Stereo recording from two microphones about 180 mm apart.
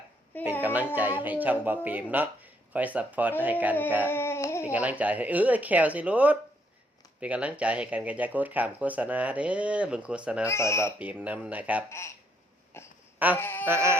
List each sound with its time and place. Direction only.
0.6 s speech: 10° right (ahead or behind)
4.0 s a sound: 15° left (ahead or behind)
4.6 s speech: 10° right (ahead or behind)
10.4 s speech: 15° left (ahead or behind)
11.0 s speech: 10° right (ahead or behind)
11.9 s speech: 15° left (ahead or behind)
13.7 s speech: 15° right (ahead or behind)